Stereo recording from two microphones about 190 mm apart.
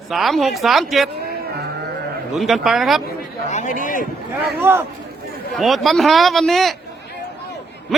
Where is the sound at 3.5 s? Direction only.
40° left (ahead or behind).